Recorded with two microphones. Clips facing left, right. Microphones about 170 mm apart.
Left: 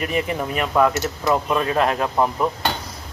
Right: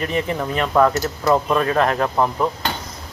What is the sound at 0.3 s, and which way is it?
Speech, 10° left (ahead or behind).